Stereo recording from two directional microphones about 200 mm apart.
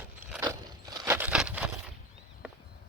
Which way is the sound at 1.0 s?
10° right (ahead or behind).